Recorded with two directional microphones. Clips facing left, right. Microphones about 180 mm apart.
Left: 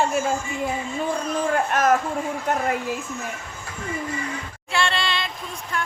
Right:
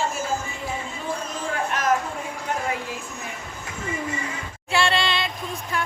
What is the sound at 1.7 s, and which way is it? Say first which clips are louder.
Speech: left 5 dB; 50° left (ahead or behind).